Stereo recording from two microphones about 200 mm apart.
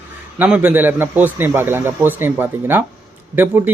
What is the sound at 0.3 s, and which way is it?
A man's voice, 10° right (ahead or behind).